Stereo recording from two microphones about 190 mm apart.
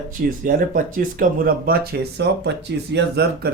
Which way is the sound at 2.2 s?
65° right (ahead or behind).